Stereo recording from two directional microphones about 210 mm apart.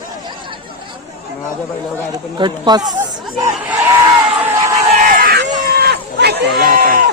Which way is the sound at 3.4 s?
15° right (ahead or behind).